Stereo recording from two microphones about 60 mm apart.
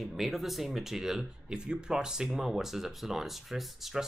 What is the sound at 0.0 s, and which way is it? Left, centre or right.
Speech, centre.